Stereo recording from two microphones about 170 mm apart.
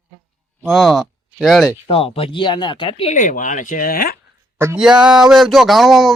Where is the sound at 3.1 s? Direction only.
50° left (ahead or behind).